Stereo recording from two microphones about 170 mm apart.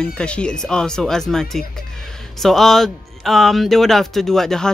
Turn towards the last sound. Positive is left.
turn(degrees=5)  # may be behind; listen again after turning